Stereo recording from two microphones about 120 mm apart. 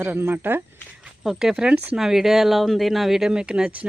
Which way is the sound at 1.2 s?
5° right (ahead or behind).